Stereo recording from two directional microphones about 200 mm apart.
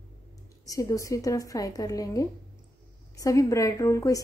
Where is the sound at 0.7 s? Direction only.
15° left (ahead or behind).